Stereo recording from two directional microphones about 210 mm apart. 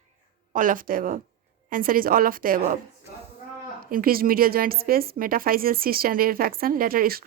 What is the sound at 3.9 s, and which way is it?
Speech, 45° right (ahead or behind).